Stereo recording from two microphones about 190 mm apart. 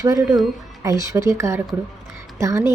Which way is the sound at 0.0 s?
15° right (ahead or behind).